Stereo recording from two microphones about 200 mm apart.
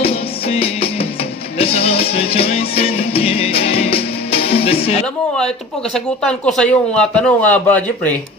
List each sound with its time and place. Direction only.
0.0 s music: 30° left (ahead or behind)
5.9 s a man's voice: 5° left (ahead or behind)